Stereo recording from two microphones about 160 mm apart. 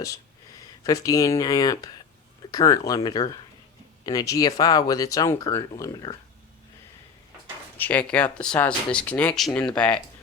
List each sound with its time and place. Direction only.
0.9 s speech: 20° left (ahead or behind)
7.8 s speech: 10° left (ahead or behind)